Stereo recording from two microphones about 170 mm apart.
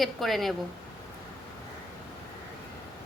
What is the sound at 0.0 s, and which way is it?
Speech, centre (ahead or behind).